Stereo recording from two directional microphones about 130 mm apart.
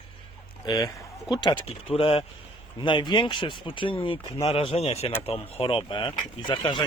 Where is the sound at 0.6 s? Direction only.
30° left (ahead or behind).